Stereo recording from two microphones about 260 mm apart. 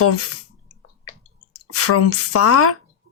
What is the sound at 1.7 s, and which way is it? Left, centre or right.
Speech, left.